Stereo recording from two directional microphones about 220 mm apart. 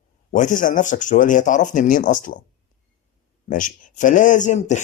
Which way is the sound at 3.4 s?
40° left (ahead or behind).